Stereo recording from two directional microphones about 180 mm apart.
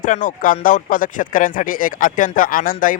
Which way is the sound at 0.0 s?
45° left (ahead or behind).